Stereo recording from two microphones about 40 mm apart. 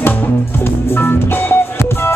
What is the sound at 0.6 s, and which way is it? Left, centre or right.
Music, left.